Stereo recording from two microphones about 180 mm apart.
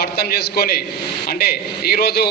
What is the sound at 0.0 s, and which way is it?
A man's voice, 60° left (ahead or behind).